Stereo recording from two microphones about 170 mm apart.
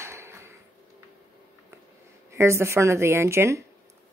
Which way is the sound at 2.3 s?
15° right (ahead or behind).